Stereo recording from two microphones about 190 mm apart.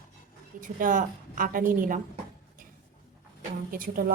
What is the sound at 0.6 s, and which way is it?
A woman's voice, 45° right (ahead or behind).